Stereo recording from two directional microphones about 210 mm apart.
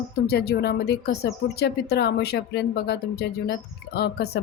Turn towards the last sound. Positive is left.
turn(degrees=50)  # may be behind; listen again after turning